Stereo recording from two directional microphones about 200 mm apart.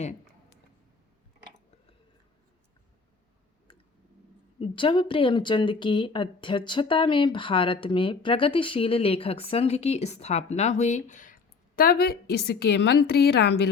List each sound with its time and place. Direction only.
0.0 s a sound: 35° left (ahead or behind)
4.6 s speech: 25° left (ahead or behind)
11.8 s a woman's voice: 50° left (ahead or behind)